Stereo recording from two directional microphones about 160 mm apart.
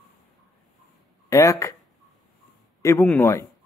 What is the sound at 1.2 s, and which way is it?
Speech, 20° left (ahead or behind).